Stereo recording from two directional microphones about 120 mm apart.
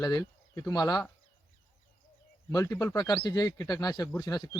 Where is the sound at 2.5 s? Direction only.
30° left (ahead or behind).